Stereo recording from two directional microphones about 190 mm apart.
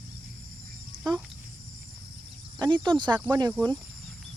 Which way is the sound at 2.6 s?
25° right (ahead or behind).